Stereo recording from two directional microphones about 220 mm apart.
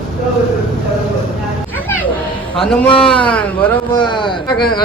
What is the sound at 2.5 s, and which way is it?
A man's voice, 5° left (ahead or behind).